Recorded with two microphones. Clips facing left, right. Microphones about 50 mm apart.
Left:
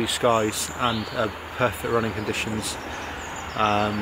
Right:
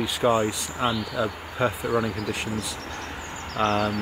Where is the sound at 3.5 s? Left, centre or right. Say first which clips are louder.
Left 1 dB; centre.